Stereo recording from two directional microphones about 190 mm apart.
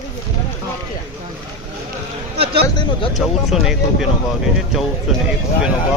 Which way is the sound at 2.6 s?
25° left (ahead or behind).